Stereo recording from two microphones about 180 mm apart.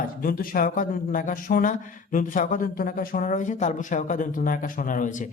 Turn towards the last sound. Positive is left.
turn(degrees=45)  # may be behind; listen again after turning